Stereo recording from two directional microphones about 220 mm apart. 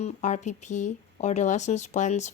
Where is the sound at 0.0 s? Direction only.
30° left (ahead or behind).